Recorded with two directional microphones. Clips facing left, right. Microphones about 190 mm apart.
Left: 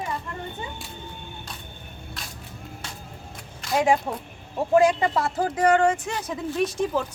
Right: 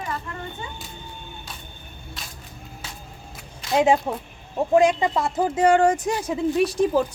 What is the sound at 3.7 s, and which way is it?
Speech, 20° right (ahead or behind).